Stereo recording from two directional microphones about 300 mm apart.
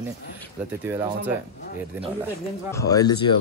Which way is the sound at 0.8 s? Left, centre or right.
Centre.